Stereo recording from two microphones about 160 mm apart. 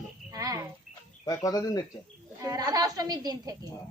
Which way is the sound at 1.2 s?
20° left (ahead or behind).